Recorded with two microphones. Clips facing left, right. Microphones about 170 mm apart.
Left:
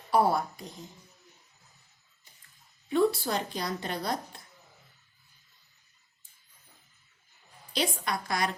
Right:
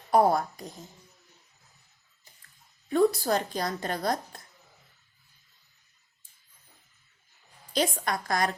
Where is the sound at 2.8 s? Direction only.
45° right (ahead or behind).